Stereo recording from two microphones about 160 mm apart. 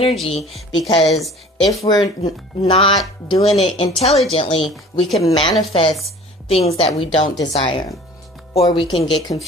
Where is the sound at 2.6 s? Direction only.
35° left (ahead or behind).